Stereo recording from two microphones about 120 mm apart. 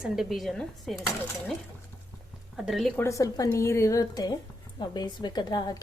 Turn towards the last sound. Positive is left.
turn(degrees=35)  # may be behind; listen again after turning